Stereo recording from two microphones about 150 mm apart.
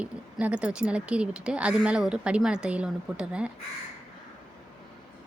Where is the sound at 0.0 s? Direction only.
10° right (ahead or behind).